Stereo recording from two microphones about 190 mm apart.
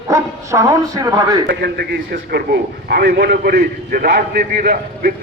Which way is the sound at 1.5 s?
55° right (ahead or behind).